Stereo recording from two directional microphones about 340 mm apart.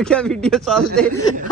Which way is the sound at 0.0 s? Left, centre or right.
Centre.